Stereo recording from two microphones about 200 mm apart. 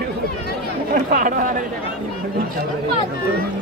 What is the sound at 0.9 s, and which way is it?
Speech, 40° right (ahead or behind).